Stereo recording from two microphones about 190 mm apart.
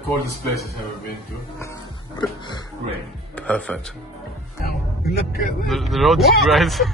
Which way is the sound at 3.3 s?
5° left (ahead or behind).